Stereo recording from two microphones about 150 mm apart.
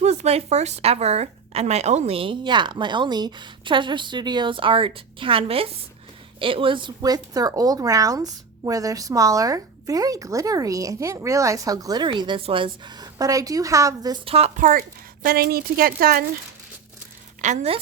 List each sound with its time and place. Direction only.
0.0 s speech: 45° right (ahead or behind); by 14.2 s 25° right (ahead or behind)
14.3 s speech: 45° right (ahead or behind)
14.6 s a woman's voice: 70° right (ahead or behind)
17.4 s a woman's voice: 50° right (ahead or behind)